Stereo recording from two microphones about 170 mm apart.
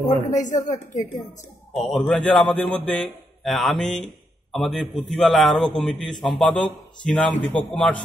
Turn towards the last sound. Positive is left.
turn(degrees=5)  # may be behind; listen again after turning